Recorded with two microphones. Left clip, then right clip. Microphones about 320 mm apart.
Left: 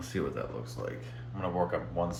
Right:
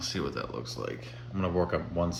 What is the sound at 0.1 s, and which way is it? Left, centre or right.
Speech, centre.